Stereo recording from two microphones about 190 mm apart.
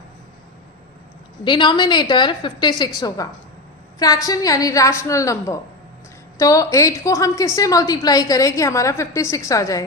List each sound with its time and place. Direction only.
1.5 s a woman's voice: 25° left (ahead or behind)